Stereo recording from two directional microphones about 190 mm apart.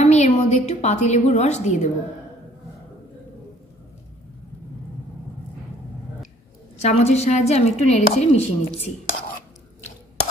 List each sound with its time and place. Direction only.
0.0 s a woman's voice: 35° left (ahead or behind)
6.8 s a woman's voice: 35° left (ahead or behind)